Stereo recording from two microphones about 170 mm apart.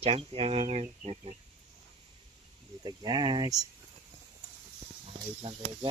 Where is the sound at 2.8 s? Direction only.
25° right (ahead or behind).